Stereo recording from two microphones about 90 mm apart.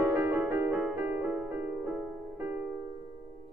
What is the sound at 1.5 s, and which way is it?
Music, 25° right (ahead or behind).